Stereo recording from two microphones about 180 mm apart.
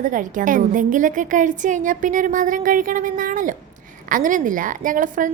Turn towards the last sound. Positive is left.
turn(degrees=-45)  # may be behind; listen again after turning